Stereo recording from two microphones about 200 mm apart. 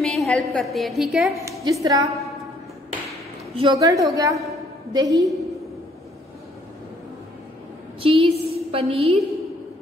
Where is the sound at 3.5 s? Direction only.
20° right (ahead or behind).